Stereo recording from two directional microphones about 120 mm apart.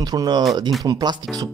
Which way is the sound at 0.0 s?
35° right (ahead or behind).